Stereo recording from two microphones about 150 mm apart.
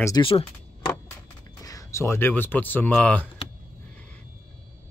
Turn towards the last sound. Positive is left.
turn(degrees=10)  # may be behind; listen again after turning